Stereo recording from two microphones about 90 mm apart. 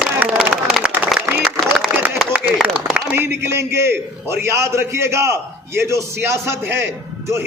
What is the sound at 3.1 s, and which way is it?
A man's voice, 25° right (ahead or behind).